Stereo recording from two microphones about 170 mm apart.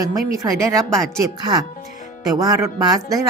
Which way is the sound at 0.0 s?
20° right (ahead or behind).